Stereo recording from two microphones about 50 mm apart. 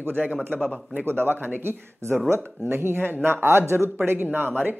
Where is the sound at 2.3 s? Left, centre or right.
Right.